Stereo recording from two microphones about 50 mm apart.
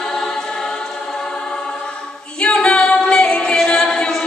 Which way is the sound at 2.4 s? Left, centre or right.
Left.